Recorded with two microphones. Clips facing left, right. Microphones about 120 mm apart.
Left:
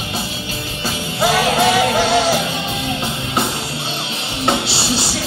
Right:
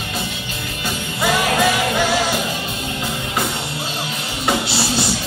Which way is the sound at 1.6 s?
25° left (ahead or behind).